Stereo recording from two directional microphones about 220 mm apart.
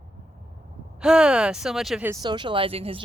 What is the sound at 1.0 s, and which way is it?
Speech, 5° right (ahead or behind).